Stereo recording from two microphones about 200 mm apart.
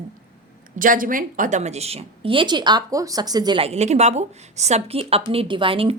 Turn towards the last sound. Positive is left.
turn(degrees=-25)  # may be behind; listen again after turning